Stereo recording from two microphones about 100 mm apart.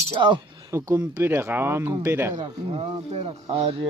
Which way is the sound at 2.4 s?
55° right (ahead or behind).